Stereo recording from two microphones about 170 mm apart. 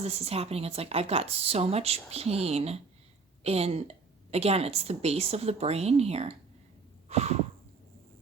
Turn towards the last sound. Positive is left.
turn(degrees=-40)  # may be behind; listen again after turning